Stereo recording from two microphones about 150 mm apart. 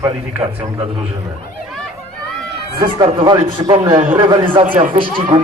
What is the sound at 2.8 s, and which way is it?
A man's voice, 30° right (ahead or behind).